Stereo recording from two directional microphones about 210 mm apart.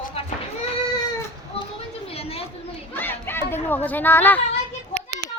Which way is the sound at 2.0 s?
30° left (ahead or behind).